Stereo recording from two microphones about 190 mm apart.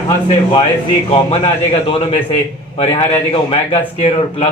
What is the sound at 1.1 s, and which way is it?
Speech, 30° left (ahead or behind).